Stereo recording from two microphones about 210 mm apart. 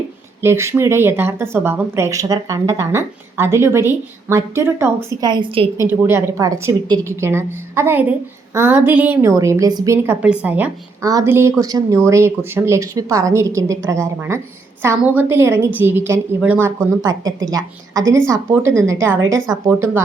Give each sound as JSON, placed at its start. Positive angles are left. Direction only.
{"t": 0.4, "sound": "a woman's voice", "side_deg": -10}
{"t": 5.2, "sound": "a woman's voice", "side_deg": -20}
{"t": 5.7, "sound": "a woman's voice", "side_deg": -10}